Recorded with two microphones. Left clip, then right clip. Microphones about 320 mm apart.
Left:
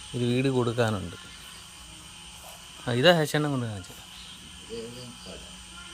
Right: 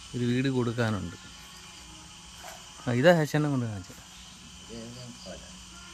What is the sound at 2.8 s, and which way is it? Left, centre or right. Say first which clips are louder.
Speech: left 1 dB; centre.